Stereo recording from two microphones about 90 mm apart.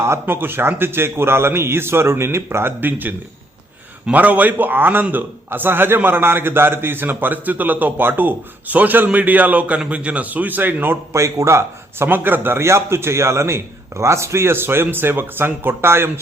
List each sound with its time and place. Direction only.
0.0 s a man's voice: 25° right (ahead or behind)